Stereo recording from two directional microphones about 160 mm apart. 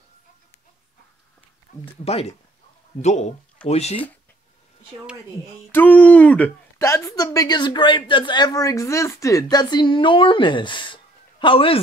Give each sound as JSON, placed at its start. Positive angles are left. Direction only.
{"t": 1.7, "sound": "speech", "side_deg": 50}
{"t": 2.0, "sound": "speech", "side_deg": 40}
{"t": 5.7, "sound": "speech", "side_deg": 10}
{"t": 6.8, "sound": "a woman's voice", "side_deg": 20}